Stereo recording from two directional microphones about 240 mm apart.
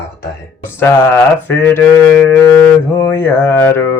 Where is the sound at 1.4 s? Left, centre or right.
Centre.